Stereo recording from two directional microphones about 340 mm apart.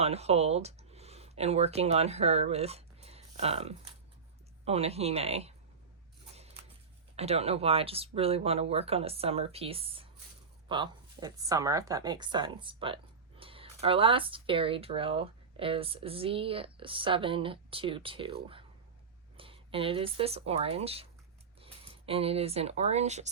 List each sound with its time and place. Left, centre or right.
0.0 s a woman's voice: centre
7.2 s a woman's voice: centre